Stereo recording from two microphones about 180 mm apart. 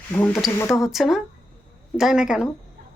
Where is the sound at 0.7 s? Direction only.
Centre (ahead or behind).